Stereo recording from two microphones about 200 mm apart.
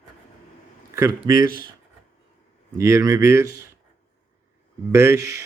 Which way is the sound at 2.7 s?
15° right (ahead or behind).